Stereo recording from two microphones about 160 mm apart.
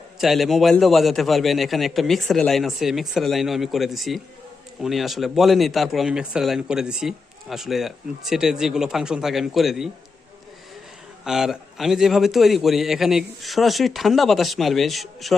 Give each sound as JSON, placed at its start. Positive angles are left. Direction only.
{"t": 0.2, "sound": "a man's voice", "side_deg": 0}
{"t": 11.2, "sound": "a man's voice", "side_deg": -5}